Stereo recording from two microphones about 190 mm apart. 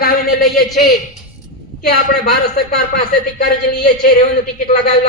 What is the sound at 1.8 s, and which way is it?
A woman's voice, 55° left (ahead or behind).